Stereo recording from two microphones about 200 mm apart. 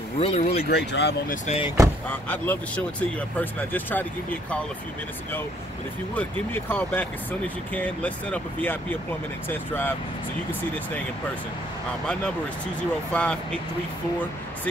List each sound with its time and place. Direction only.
0.2 s speech: 35° left (ahead or behind)
0.7 s speech: 55° left (ahead or behind)
1.3 s speech: 30° left (ahead or behind)
2.0 s speech: 5° left (ahead or behind)
6.1 s speech: 10° left (ahead or behind)
13.1 s speech: 5° left (ahead or behind)